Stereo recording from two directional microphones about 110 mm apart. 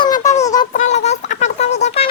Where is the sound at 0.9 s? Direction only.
90° left.